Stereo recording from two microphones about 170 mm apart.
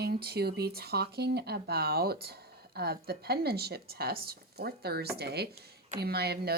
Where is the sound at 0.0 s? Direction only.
65° right (ahead or behind).